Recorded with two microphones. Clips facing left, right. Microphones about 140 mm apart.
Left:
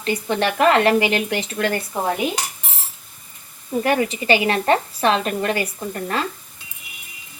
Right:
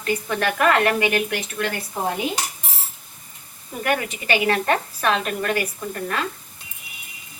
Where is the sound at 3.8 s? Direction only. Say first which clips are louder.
Left 4 dB; 30° left (ahead or behind).